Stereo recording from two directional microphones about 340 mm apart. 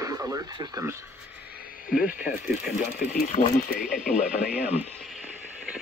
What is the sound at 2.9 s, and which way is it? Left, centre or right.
Radio, centre.